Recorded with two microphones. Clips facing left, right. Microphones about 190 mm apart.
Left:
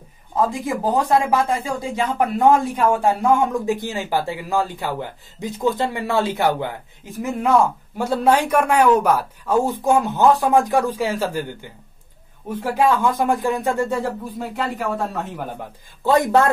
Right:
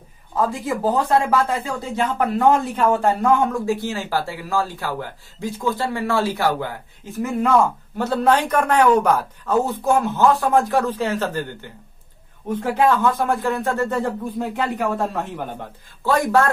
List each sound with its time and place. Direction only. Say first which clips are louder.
0.7 s speech: even; 15° left (ahead or behind)
8.0 s speech: left 1 dB; 10° left (ahead or behind)
16.0 s speech: left 2 dB; 20° left (ahead or behind)